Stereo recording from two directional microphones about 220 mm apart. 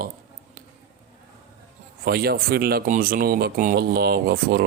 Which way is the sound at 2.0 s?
45° right (ahead or behind).